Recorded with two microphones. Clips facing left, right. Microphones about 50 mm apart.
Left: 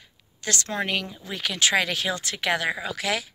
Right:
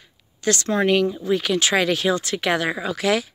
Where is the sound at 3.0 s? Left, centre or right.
Right.